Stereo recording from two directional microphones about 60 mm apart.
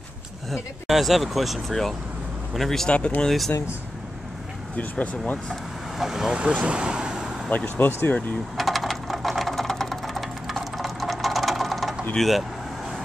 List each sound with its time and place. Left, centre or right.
0.5 s speech: centre
4.7 s speech: left
5.9 s speech: centre
7.4 s speech: left
8.5 s sewing machine: centre
12.2 s speech: centre